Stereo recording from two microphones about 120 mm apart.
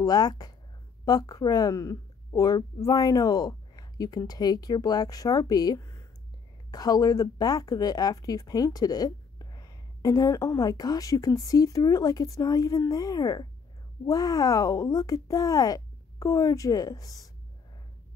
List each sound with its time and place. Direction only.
0.0 s speech: 35° left (ahead or behind)